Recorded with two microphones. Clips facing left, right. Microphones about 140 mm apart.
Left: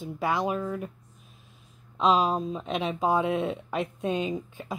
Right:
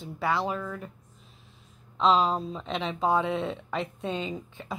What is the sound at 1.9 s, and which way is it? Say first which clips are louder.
Speech: even; 15° left (ahead or behind).